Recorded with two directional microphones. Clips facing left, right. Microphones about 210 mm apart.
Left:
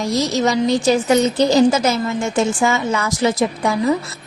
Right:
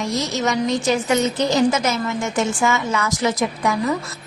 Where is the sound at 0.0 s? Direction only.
35° left (ahead or behind).